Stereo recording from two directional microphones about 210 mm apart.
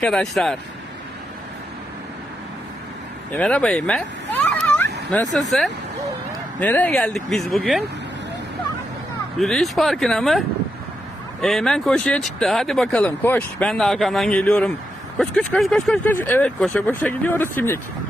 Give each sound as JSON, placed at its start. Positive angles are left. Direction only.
{"t": 0.0, "sound": "speech", "side_deg": 0}
{"t": 3.3, "sound": "vehicle", "side_deg": 5}
{"t": 5.5, "sound": "speech", "side_deg": 0}
{"t": 9.4, "sound": "speech", "side_deg": 0}